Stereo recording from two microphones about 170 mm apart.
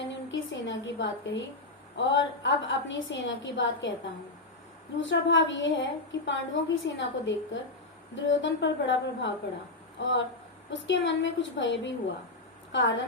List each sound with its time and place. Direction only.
0.0 s a sound: 90° left
2.0 s a woman's voice: 90° left
4.9 s a woman's voice: 90° left